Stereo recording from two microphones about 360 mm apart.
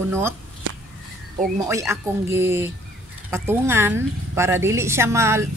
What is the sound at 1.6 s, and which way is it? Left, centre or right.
A woman's voice, centre.